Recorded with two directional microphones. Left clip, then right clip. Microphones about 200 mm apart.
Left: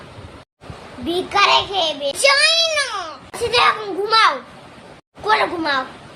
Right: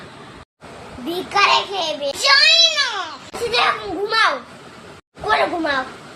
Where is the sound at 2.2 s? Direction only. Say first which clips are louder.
Right 2 dB; 40° left (ahead or behind).